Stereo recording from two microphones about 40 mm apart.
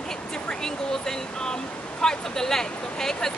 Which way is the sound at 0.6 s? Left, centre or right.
Centre.